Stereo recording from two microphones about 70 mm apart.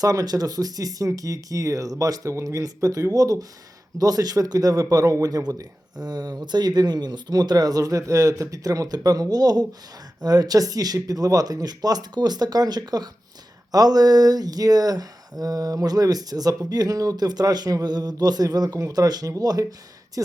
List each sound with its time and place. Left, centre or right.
0.0 s speech: right
5.5 s speech: right
13.7 s speech: right
20.2 s speech: right